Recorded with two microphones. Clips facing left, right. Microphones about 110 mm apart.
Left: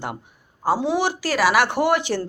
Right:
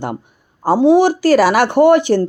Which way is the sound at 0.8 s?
25° right (ahead or behind).